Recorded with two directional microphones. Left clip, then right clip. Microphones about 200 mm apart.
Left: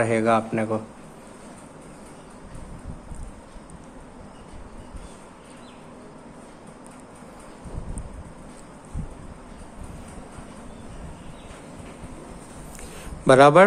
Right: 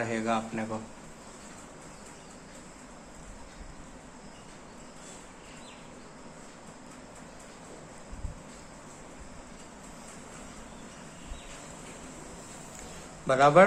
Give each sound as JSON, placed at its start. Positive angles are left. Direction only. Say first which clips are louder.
{"t": 0.0, "sound": "a man's voice", "louder": "left 10 dB", "side_deg": 50}
{"t": 13.2, "sound": "a man's voice", "louder": "left 7 dB", "side_deg": 55}